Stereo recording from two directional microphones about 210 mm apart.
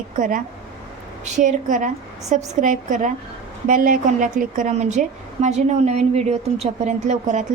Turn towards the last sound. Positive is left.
turn(degrees=-35)  # may be behind; listen again after turning